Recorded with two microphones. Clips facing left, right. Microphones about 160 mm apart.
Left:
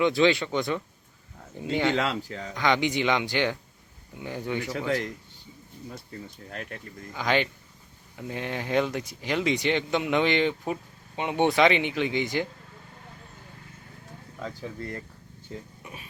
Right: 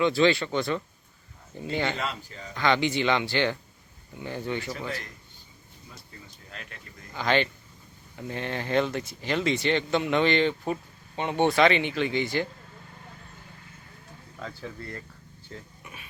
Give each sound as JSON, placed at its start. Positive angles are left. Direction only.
{"t": 0.0, "sound": "speech", "side_deg": 15}
{"t": 2.0, "sound": "a man's voice", "side_deg": 90}
{"t": 2.6, "sound": "speech", "side_deg": 15}
{"t": 5.9, "sound": "speech", "side_deg": 50}
{"t": 7.1, "sound": "speech", "side_deg": 10}
{"t": 14.3, "sound": "speech", "side_deg": 10}
{"t": 14.8, "sound": "speech", "side_deg": 20}
{"t": 15.8, "sound": "a sound", "side_deg": 30}